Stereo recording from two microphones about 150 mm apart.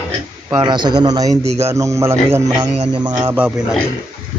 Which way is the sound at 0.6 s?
30° right (ahead or behind).